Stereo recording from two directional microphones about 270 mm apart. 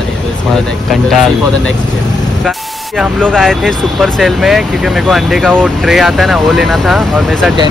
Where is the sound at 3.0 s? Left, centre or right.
Centre.